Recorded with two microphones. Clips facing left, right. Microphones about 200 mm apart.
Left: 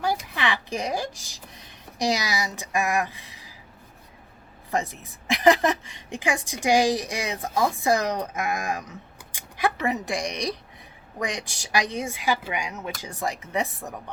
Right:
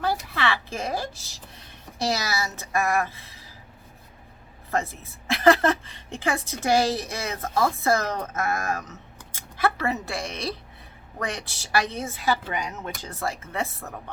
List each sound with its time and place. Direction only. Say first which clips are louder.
0.0 s speech: even; 15° left (ahead or behind)
4.7 s a woman's voice: even; 15° left (ahead or behind)